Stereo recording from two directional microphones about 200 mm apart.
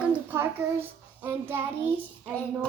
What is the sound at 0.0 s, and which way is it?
Child singing, 10° right (ahead or behind).